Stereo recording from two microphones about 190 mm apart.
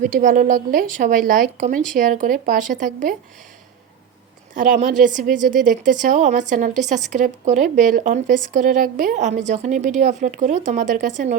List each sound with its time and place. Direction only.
0.1 s a woman's voice: 40° right (ahead or behind)
4.5 s a woman's voice: 40° right (ahead or behind)